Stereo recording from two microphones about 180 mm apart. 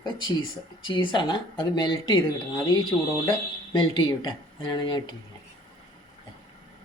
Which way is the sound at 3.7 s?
25° left (ahead or behind).